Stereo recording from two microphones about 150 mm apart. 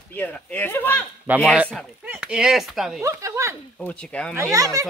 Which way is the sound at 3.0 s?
20° right (ahead or behind).